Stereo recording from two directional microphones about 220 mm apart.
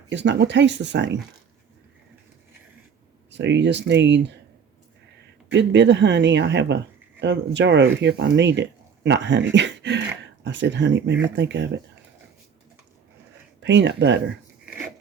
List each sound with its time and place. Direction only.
0.1 s speech: 55° right (ahead or behind)
3.3 s speech: 55° right (ahead or behind)
5.5 s speech: 55° right (ahead or behind)
13.6 s speech: 55° right (ahead or behind)